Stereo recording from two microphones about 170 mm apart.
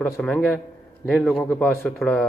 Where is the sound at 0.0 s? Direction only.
10° left (ahead or behind).